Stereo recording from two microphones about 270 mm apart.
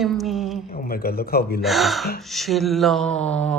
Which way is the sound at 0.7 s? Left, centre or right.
Left.